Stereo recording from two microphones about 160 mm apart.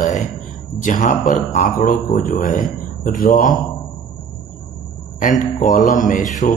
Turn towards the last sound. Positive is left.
turn(degrees=50)  # may be behind; listen again after turning